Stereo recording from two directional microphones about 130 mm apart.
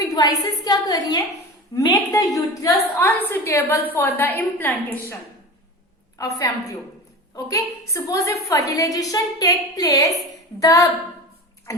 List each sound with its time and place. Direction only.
0.1 s a woman's voice: 30° left (ahead or behind)
6.1 s a woman's voice: 25° left (ahead or behind)